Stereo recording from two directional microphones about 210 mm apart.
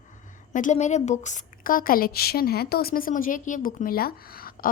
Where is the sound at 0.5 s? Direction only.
35° left (ahead or behind).